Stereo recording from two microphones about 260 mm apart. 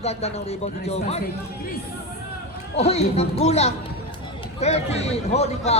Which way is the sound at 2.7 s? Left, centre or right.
Left.